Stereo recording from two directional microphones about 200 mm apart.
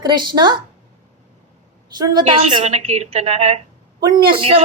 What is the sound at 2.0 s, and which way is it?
A woman's voice, 20° right (ahead or behind).